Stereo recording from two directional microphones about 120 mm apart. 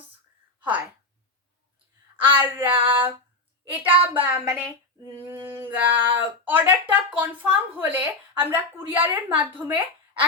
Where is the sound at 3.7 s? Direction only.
15° right (ahead or behind).